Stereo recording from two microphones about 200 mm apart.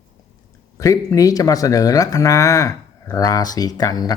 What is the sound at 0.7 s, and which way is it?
Speech, 15° left (ahead or behind).